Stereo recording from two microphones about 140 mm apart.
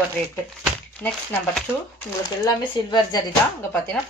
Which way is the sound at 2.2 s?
30° left (ahead or behind).